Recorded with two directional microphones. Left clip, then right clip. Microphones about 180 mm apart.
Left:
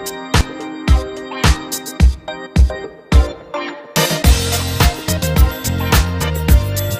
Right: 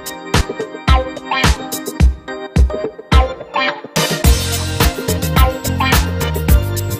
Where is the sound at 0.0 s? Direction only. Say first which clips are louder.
Even; centre (ahead or behind).